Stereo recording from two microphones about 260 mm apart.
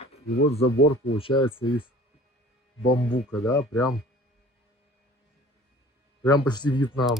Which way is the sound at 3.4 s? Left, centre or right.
Centre.